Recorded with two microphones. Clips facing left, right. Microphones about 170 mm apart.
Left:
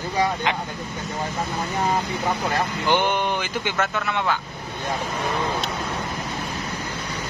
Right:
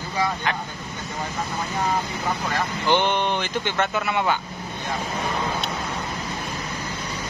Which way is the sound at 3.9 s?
5° right (ahead or behind).